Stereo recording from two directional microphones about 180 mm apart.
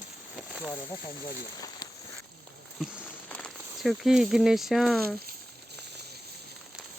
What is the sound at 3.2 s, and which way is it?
Speech, 5° left (ahead or behind).